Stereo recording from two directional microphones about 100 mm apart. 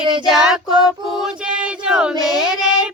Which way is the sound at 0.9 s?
5° right (ahead or behind).